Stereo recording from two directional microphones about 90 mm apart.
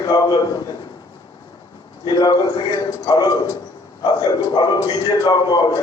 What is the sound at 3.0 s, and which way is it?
Speech, 45° left (ahead or behind).